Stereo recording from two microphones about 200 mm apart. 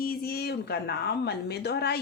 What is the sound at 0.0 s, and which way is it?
A woman's voice, 50° left (ahead or behind).